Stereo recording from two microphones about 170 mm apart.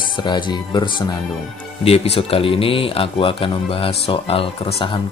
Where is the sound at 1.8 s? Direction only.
35° left (ahead or behind).